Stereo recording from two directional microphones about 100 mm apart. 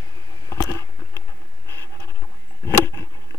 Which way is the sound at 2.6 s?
30° left (ahead or behind).